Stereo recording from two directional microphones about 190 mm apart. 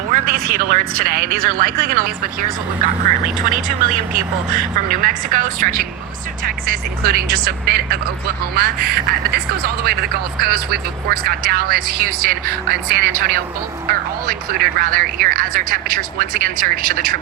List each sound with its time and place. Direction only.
0.1 s speech: 50° right (ahead or behind)
3.5 s speech: 45° right (ahead or behind)